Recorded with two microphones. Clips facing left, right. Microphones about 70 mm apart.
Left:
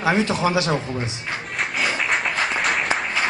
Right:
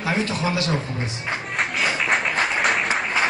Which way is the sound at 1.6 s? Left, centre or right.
Centre.